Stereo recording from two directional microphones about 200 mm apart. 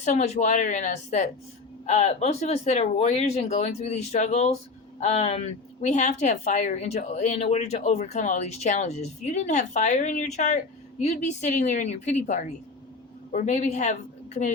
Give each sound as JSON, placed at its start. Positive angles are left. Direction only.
{"t": 0.0, "sound": "a woman's voice", "side_deg": 35}